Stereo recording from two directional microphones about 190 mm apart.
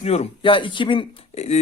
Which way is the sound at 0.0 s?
35° left (ahead or behind).